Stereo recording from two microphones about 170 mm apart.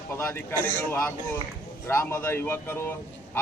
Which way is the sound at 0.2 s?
15° left (ahead or behind).